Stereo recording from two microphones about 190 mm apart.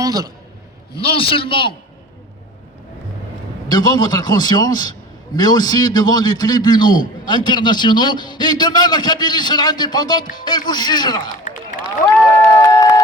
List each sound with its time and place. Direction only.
0.0 s a man's voice: 20° right (ahead or behind)
1.1 s a man's voice: 30° left (ahead or behind)
3.7 s a man's voice: 20° left (ahead or behind)
11.2 s a sound: 45° left (ahead or behind)
12.4 s crowd: 20° left (ahead or behind)